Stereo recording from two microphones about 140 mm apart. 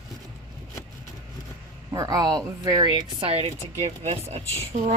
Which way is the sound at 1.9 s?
25° right (ahead or behind).